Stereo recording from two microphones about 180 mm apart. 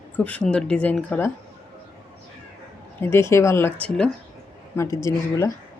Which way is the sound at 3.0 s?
15° left (ahead or behind).